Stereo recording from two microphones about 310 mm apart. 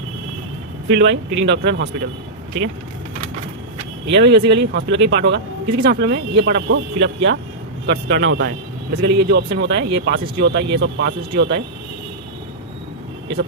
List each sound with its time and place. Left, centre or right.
0.9 s speech: right
4.0 s speech: right
4.4 s speech: right
4.7 s speech: right